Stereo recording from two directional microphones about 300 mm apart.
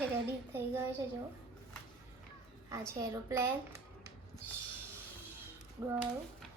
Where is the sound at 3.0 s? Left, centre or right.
Centre.